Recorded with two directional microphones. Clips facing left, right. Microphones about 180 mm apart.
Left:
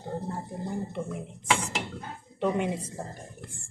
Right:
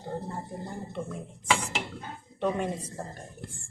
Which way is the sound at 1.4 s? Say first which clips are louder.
Even; centre (ahead or behind).